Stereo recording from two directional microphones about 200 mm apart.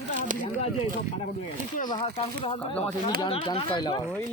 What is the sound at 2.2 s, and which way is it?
Speech, 25° left (ahead or behind).